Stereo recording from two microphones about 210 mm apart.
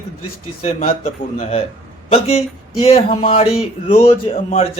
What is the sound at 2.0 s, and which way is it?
Speech, 30° left (ahead or behind).